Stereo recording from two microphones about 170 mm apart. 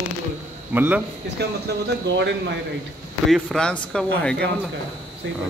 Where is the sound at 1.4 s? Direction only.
75° right (ahead or behind).